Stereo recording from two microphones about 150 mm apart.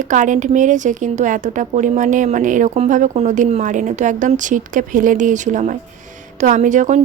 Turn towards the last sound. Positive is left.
turn(degrees=-55)  # may be behind; listen again after turning